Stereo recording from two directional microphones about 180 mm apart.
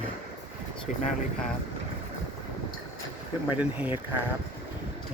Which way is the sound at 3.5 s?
10° right (ahead or behind).